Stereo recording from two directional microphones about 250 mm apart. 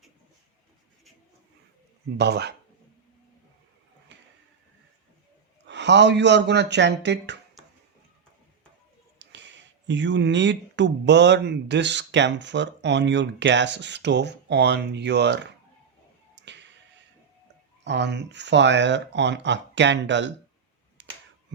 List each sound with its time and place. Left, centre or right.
2.1 s speech: right
5.6 s speech: right
7.6 s finger snapping: centre
9.1 s speech: right
17.8 s speech: right
21.0 s finger snapping: right